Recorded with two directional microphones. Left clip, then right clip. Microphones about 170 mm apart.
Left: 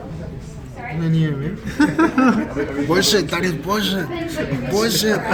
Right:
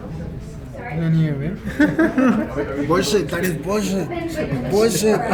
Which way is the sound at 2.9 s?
25° left (ahead or behind).